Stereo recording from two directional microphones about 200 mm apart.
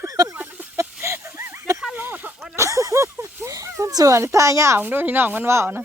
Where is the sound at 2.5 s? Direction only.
15° right (ahead or behind).